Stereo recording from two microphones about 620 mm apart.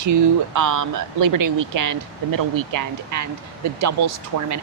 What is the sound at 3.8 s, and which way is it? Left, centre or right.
Speech, right.